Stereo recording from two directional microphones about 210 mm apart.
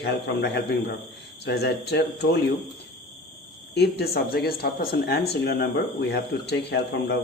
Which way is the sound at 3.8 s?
50° left (ahead or behind).